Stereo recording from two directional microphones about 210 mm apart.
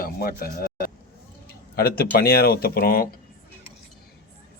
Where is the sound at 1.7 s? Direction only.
45° left (ahead or behind).